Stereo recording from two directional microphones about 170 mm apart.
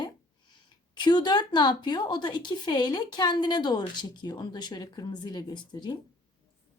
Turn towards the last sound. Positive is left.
turn(degrees=25)  # may be behind; listen again after turning